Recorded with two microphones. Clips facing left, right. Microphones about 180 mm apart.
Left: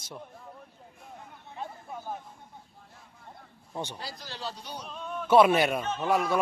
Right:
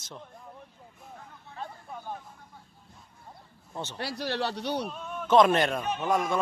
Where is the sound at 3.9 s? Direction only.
70° right (ahead or behind).